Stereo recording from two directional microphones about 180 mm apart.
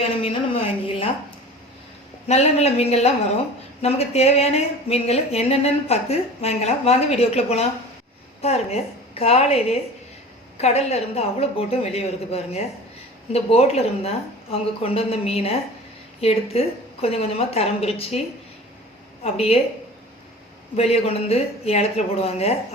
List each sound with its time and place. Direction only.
0.2 s a sound: 30° left (ahead or behind)
2.2 s speech: 35° left (ahead or behind)
19.2 s speech: 35° left (ahead or behind)
20.7 s speech: 35° left (ahead or behind)